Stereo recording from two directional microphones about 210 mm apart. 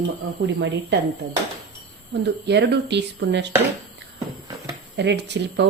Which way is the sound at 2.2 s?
55° right (ahead or behind).